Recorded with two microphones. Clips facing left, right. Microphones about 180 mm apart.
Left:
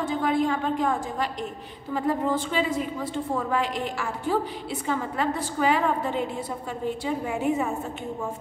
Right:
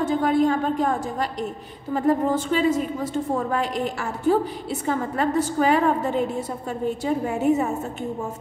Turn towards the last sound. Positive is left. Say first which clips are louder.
# right 4 dB
turn(degrees=-40)  # may be behind; listen again after turning